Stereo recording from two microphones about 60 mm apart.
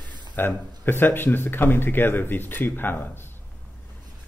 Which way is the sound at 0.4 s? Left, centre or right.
Left.